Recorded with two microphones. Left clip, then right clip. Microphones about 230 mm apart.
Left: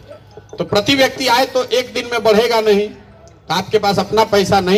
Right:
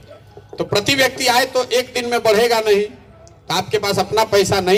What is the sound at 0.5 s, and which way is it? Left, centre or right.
A man's voice, right.